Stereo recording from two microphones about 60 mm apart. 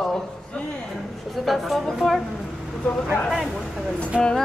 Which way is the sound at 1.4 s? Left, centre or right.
Centre.